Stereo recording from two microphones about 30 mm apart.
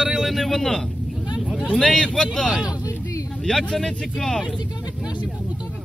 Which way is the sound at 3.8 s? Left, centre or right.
Centre.